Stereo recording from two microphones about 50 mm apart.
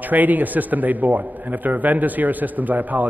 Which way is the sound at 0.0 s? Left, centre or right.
Right.